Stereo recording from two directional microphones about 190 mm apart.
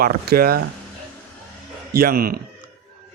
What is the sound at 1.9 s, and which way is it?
Speech, 55° right (ahead or behind).